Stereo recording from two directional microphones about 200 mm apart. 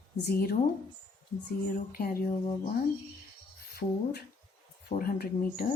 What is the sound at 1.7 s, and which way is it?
Speech, 45° left (ahead or behind).